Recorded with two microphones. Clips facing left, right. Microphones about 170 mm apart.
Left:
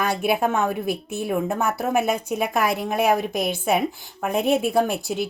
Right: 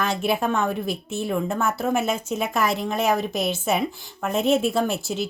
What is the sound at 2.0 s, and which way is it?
Speech, 60° left (ahead or behind).